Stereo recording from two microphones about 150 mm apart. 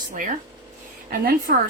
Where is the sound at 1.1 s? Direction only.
75° right (ahead or behind).